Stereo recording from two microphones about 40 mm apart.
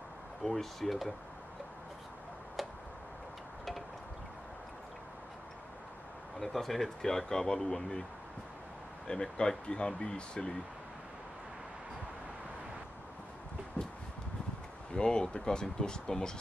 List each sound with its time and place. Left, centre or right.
0.4 s speech: centre
6.4 s speech: centre
9.0 s speech: left
14.9 s speech: left